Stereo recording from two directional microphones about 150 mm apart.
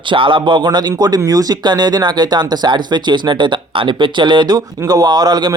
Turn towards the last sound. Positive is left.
turn(degrees=-25)  # may be behind; listen again after turning